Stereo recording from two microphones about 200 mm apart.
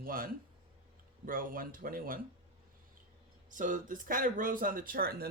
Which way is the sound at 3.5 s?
40° right (ahead or behind).